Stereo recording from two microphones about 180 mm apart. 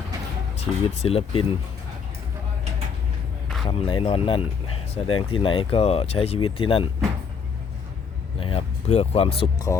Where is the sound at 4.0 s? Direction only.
30° left (ahead or behind).